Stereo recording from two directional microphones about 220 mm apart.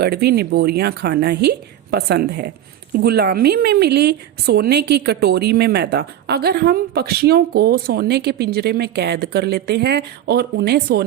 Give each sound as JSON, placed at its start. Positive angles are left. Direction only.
{"t": 0.0, "sound": "a woman's voice", "side_deg": -45}